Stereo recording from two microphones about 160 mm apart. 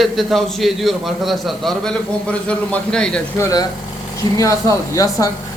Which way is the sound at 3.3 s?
20° left (ahead or behind).